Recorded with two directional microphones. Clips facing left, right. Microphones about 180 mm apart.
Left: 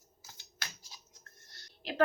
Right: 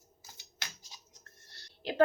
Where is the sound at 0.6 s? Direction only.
20° right (ahead or behind).